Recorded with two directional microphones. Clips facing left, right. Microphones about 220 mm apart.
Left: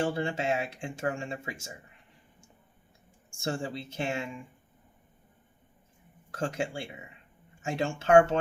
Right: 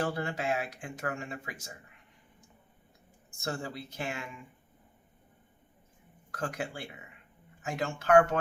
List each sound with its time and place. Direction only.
0.0 s speech: 25° left (ahead or behind)
3.3 s speech: 30° left (ahead or behind)
6.3 s speech: 25° left (ahead or behind)